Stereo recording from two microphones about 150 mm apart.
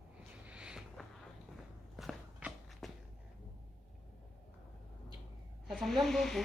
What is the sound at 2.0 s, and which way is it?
Run, centre (ahead or behind).